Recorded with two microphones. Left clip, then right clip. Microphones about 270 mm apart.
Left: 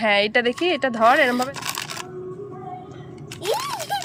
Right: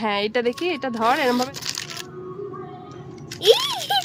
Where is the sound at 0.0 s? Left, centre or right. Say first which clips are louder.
Left 4 dB; centre.